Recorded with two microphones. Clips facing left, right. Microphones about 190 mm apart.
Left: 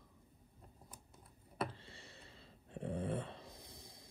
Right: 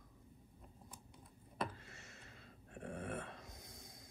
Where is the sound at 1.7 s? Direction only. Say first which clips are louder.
Left 1 dB; 30° left (ahead or behind).